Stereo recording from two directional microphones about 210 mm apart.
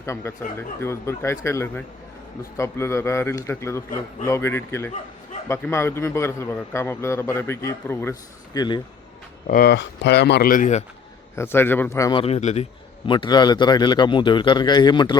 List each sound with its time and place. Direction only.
0.0 s a man's voice: 10° left (ahead or behind)
9.5 s speech: 50° left (ahead or behind)
11.3 s a man's voice: 10° left (ahead or behind)
12.2 s a man's voice: 30° left (ahead or behind)